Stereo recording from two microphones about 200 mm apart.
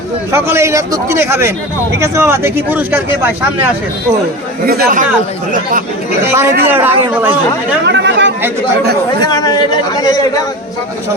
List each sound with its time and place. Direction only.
0.3 s speech: 15° right (ahead or behind)
4.6 s speech: 50° right (ahead or behind)
6.3 s speech: 10° right (ahead or behind)
7.9 s speech: 60° right (ahead or behind)
9.2 s a man's voice: 20° left (ahead or behind)